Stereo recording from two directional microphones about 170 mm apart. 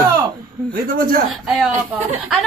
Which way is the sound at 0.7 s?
55° right (ahead or behind).